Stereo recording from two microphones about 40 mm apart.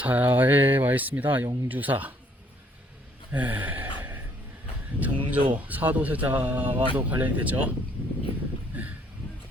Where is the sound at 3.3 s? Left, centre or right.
Right.